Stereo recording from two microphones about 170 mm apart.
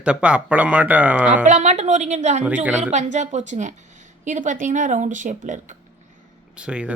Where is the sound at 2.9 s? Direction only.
45° right (ahead or behind).